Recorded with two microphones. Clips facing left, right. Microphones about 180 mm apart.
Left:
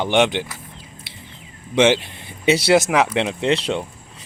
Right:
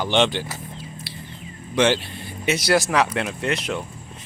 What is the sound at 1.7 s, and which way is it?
Speech, 20° left (ahead or behind).